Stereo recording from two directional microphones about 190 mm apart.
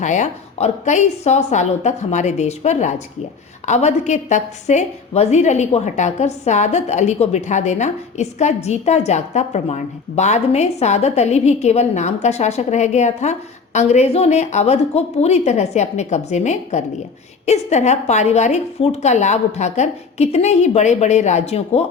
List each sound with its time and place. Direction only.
0.0 s a woman's voice: 40° left (ahead or behind)